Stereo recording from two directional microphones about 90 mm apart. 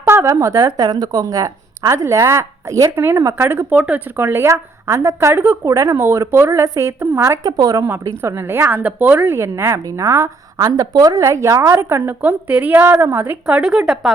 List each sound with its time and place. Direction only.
0.1 s a woman's voice: 30° right (ahead or behind)
2.9 s a woman's voice: 25° right (ahead or behind)
3.7 s a woman's voice: 10° right (ahead or behind)
5.6 s a woman's voice: 35° right (ahead or behind)
8.2 s a woman's voice: 30° right (ahead or behind)
13.5 s speech: 10° right (ahead or behind)